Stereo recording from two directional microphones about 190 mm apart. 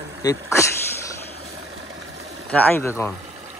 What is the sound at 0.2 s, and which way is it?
Speech, 20° left (ahead or behind).